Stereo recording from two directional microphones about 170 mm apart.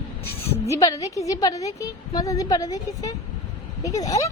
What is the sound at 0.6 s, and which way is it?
A woman's voice, 20° left (ahead or behind).